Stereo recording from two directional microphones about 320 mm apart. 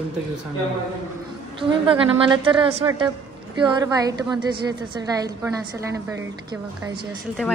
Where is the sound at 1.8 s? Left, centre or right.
Centre.